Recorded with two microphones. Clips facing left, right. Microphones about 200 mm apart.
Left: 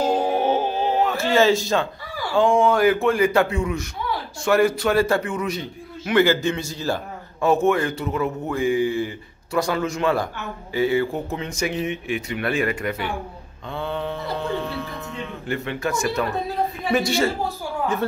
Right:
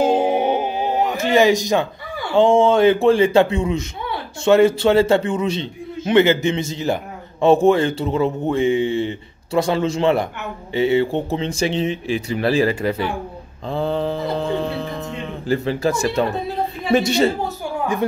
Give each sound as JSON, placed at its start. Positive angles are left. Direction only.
{"t": 0.0, "sound": "a sound", "side_deg": -20}
{"t": 2.3, "sound": "speech", "side_deg": -25}
{"t": 13.7, "sound": "music", "side_deg": -35}
{"t": 16.9, "sound": "speech", "side_deg": -20}